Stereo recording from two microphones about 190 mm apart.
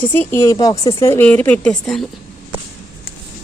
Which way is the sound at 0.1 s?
10° left (ahead or behind).